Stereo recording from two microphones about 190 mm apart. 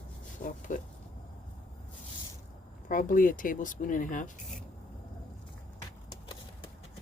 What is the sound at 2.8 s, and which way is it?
Speech, 45° left (ahead or behind).